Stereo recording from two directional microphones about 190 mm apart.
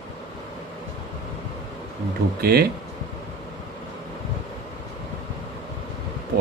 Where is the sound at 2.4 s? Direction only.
55° right (ahead or behind).